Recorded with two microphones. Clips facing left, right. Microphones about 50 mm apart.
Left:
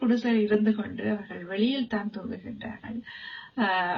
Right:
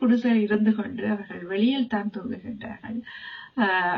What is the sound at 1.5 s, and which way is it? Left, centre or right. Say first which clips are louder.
A woman's voice: right 4 dB; right.